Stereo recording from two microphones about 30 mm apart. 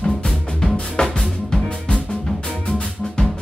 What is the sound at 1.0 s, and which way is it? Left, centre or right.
Music, left.